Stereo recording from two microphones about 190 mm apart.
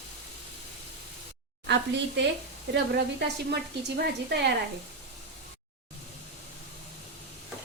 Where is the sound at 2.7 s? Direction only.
60° right (ahead or behind).